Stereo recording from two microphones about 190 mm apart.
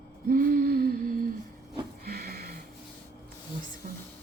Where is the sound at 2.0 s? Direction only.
50° right (ahead or behind).